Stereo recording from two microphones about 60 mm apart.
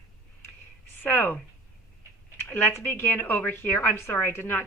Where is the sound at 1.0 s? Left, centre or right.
Left.